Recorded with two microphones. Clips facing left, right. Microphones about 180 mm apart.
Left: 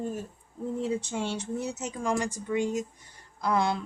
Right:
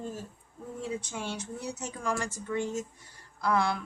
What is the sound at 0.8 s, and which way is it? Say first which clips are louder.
A woman's voice: left 3 dB; 25° left (ahead or behind).